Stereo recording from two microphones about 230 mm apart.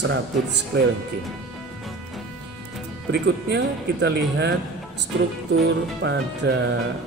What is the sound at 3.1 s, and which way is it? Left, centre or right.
Speech, right.